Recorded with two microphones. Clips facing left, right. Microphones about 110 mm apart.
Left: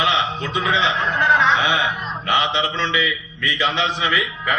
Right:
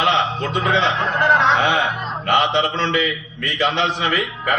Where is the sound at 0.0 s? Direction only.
50° right (ahead or behind).